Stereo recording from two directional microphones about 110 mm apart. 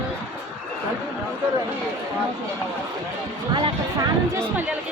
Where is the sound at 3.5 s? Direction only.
45° right (ahead or behind).